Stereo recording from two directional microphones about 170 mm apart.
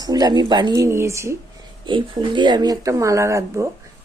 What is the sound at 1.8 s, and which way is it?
Speech, 25° right (ahead or behind).